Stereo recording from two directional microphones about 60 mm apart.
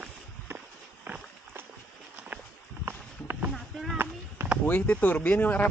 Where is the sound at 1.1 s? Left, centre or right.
Right.